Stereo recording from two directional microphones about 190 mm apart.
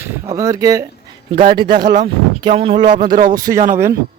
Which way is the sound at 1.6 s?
25° right (ahead or behind).